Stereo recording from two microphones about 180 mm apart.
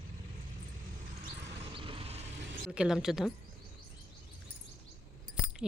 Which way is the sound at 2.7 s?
5° right (ahead or behind).